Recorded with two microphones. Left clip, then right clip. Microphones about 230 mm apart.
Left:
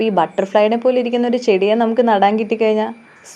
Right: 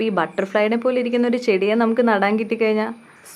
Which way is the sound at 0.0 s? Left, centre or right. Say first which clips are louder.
Left 5 dB; centre.